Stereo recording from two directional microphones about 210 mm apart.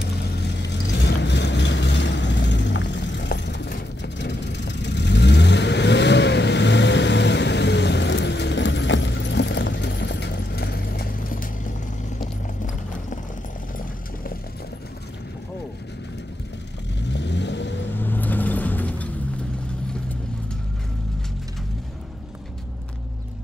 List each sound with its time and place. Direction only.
0.4 s vehicle: 55° left (ahead or behind)
12.2 s clip-clop: 35° left (ahead or behind)
17.1 s vehicle: 55° left (ahead or behind)
17.9 s vehicle: 10° left (ahead or behind)